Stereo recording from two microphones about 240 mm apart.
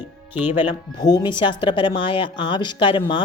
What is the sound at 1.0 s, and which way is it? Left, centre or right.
A woman's voice, centre.